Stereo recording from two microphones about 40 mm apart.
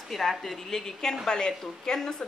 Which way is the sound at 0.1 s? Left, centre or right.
Centre.